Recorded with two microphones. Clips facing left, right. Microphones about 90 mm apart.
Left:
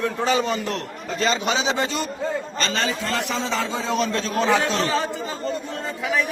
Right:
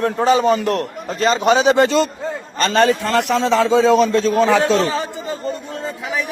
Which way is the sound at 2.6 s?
55° right (ahead or behind).